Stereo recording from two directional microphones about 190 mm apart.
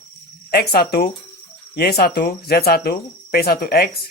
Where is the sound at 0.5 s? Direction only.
55° left (ahead or behind).